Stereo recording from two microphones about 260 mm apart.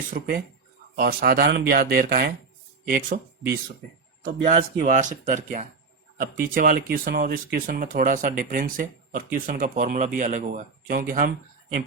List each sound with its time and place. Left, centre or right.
0.1 s speech: right
4.2 s speech: right